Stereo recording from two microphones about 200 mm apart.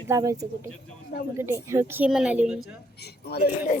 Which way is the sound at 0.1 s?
15° right (ahead or behind).